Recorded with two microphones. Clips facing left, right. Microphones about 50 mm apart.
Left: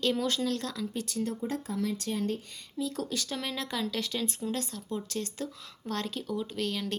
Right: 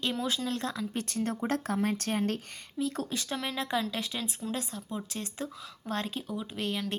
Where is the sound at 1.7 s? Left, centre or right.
Right.